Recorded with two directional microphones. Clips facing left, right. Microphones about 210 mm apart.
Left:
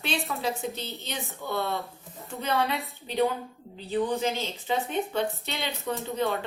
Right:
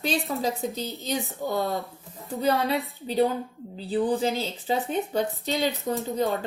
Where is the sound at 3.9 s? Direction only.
35° right (ahead or behind).